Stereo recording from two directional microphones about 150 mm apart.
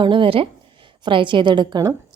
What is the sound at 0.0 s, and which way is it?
A woman's voice, 35° right (ahead or behind).